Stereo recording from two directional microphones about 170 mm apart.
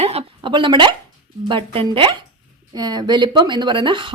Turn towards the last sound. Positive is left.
turn(degrees=-30)  # may be behind; listen again after turning